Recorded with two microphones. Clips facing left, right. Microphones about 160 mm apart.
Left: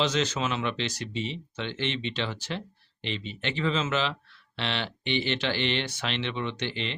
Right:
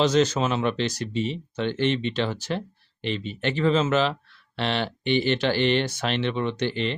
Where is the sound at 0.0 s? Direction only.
40° right (ahead or behind).